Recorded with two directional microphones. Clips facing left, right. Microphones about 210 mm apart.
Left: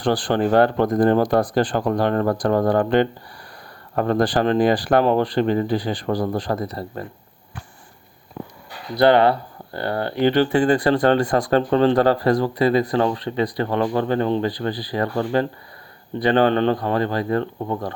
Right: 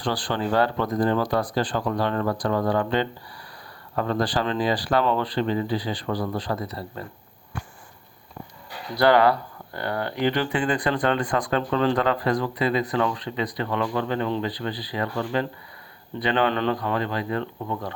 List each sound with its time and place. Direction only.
0.0 s speech: 50° left (ahead or behind)
9.0 s speech: 25° left (ahead or behind); by 17.9 s 45° left (ahead or behind)